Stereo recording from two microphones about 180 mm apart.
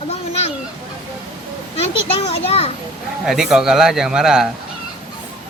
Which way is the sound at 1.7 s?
35° left (ahead or behind).